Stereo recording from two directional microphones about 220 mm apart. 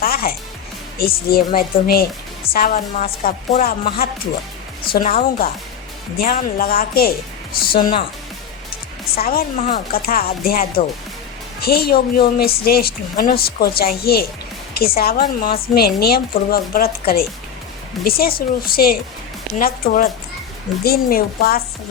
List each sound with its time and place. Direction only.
0.0 s a woman's voice: 45° left (ahead or behind)
9.1 s a woman's voice: 40° left (ahead or behind)